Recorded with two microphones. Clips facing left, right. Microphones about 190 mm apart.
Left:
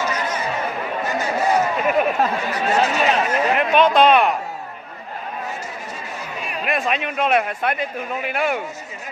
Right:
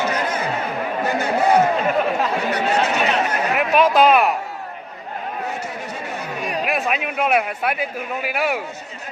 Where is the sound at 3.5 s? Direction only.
5° right (ahead or behind).